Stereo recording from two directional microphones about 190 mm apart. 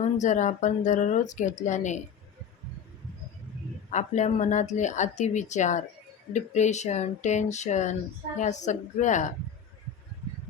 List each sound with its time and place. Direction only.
0.0 s speech: 40° left (ahead or behind)
3.9 s speech: 40° left (ahead or behind)